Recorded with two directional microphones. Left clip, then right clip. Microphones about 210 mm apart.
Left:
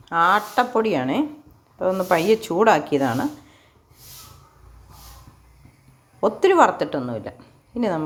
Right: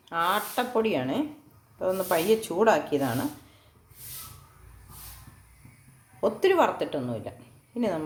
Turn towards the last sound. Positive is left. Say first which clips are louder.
# left 5 dB
turn(degrees=20)  # may be behind; listen again after turning